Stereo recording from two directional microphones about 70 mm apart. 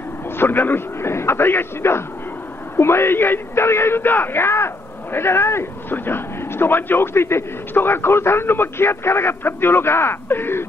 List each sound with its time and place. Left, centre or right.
0.4 s speech: left